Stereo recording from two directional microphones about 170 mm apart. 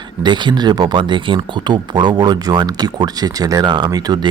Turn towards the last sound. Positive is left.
turn(degrees=-25)  # may be behind; listen again after turning